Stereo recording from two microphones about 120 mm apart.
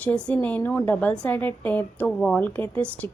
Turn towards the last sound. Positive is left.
turn(degrees=20)  # may be behind; listen again after turning